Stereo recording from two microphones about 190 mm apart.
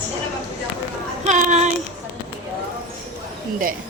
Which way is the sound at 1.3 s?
40° right (ahead or behind).